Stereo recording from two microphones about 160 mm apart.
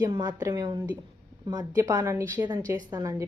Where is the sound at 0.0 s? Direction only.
25° right (ahead or behind).